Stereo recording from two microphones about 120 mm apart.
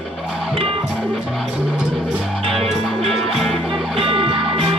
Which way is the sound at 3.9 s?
50° right (ahead or behind).